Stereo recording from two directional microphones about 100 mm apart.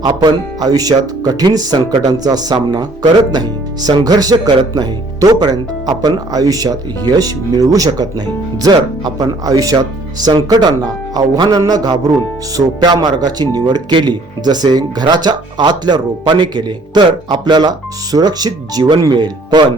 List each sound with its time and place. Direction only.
0.0 s speech: 45° right (ahead or behind)